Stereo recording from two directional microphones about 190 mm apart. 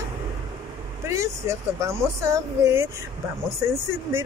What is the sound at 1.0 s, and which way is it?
Speech, 15° right (ahead or behind).